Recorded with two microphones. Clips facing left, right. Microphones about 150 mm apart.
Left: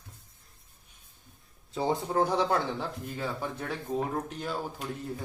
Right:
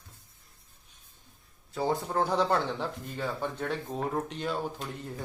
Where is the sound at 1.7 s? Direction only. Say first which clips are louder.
Left 1 dB; 15° left (ahead or behind).